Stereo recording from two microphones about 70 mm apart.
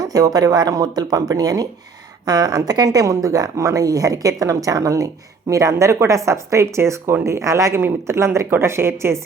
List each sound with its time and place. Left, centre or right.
0.0 s speech: right